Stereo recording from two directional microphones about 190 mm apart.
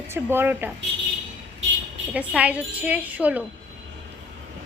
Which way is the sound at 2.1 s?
5° right (ahead or behind).